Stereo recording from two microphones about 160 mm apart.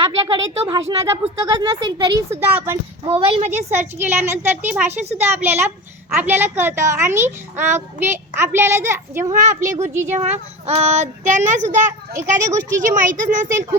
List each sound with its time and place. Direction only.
0.3 s speech: 25° right (ahead or behind)
2.3 s a child's voice: 15° right (ahead or behind)
3.1 s speech: 40° right (ahead or behind)
3.7 s a child's voice: 15° right (ahead or behind)
4.9 s speech: 45° right (ahead or behind)
5.4 s a child's voice: 15° right (ahead or behind)
9.3 s speech: 50° right (ahead or behind)
9.8 s a child's voice: 15° right (ahead or behind)
10.1 s speech: 45° right (ahead or behind)
12.1 s speech: 20° right (ahead or behind)
12.9 s speech: 50° right (ahead or behind)
13.5 s a child's voice: 20° right (ahead or behind)